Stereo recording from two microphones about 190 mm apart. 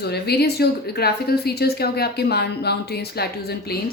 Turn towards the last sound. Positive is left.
turn(degrees=55)  # may be behind; listen again after turning